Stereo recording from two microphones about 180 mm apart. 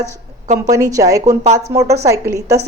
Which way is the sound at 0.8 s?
20° right (ahead or behind).